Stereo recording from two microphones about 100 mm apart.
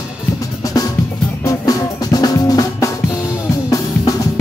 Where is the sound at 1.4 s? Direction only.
35° left (ahead or behind).